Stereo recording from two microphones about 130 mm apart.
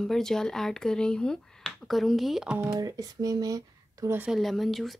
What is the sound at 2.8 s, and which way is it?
Speech, 30° right (ahead or behind).